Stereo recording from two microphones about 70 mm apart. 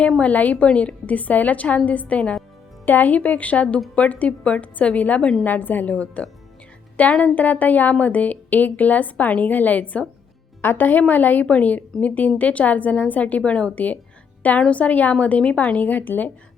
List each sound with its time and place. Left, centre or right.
0.2 s a woman's voice: left